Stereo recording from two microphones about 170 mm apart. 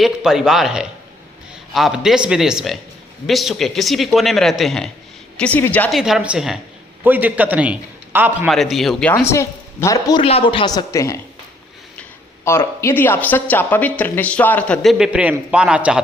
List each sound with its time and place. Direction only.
0.0 s speech: centre (ahead or behind)
5.9 s a man's voice: 5° right (ahead or behind)
8.4 s speech: centre (ahead or behind)
9.1 s speech: 15° left (ahead or behind)
10.2 s a woman's voice: 35° left (ahead or behind); by 11.2 s 20° left (ahead or behind)
12.5 s speech: 15° left (ahead or behind); by 16.0 s 5° right (ahead or behind)